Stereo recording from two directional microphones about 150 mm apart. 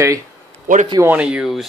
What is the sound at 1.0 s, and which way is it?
Speech, 10° right (ahead or behind).